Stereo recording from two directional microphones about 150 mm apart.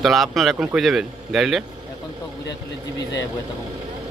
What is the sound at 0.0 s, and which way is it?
Speech, centre (ahead or behind).